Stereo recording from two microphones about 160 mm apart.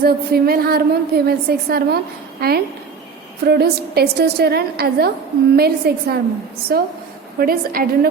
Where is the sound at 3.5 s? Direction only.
90° right.